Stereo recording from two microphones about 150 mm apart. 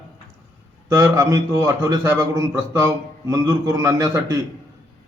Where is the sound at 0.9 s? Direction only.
20° right (ahead or behind).